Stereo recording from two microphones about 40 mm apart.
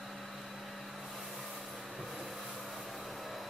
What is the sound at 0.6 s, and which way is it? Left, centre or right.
Vehicle, centre.